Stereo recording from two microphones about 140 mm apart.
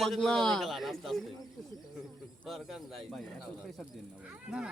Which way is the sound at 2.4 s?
Centre (ahead or behind).